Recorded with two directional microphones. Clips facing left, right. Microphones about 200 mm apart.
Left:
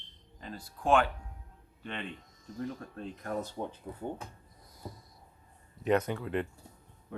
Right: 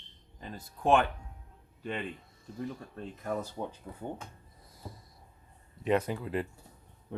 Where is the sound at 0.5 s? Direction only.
20° right (ahead or behind).